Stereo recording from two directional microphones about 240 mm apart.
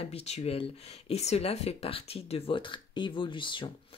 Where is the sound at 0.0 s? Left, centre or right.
Left.